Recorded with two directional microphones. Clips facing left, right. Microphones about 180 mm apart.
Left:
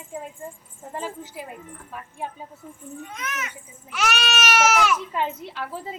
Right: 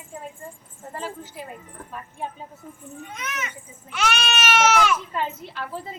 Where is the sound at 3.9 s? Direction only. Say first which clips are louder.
Even; 5° left (ahead or behind).